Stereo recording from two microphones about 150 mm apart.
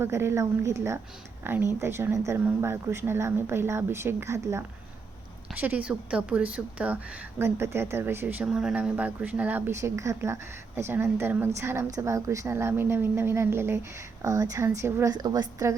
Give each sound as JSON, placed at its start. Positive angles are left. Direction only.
{"t": 0.0, "sound": "a woman's voice", "side_deg": -15}